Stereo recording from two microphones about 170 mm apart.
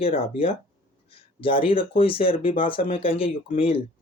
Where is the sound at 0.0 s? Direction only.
35° left (ahead or behind).